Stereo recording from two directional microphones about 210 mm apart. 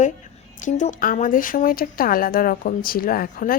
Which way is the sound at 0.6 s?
35° left (ahead or behind).